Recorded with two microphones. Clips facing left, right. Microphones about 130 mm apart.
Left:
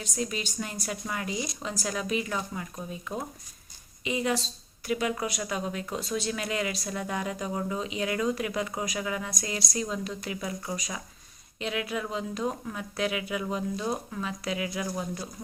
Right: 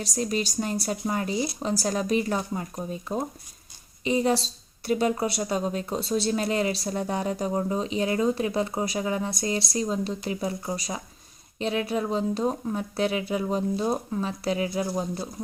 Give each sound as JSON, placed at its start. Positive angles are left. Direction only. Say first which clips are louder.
{"t": 0.0, "sound": "speech", "louder": "right 5 dB", "side_deg": -35}